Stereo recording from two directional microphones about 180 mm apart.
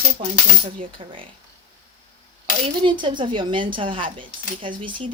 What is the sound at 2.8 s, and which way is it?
Speech, 25° right (ahead or behind).